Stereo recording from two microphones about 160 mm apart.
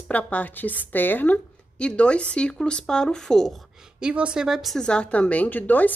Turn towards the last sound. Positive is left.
turn(degrees=10)  # may be behind; listen again after turning